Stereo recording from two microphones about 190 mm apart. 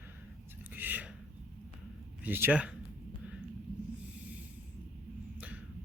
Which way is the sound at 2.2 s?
10° right (ahead or behind).